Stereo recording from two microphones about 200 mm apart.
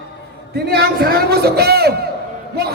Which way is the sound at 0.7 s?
50° right (ahead or behind).